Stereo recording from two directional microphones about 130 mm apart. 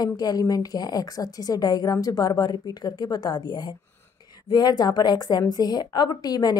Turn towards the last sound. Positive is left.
turn(degrees=30)  # may be behind; listen again after turning